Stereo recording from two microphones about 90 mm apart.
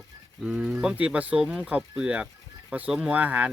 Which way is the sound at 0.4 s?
10° right (ahead or behind).